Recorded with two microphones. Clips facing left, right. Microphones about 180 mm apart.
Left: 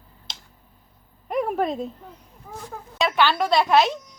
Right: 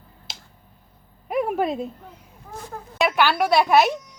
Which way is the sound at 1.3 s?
5° right (ahead or behind).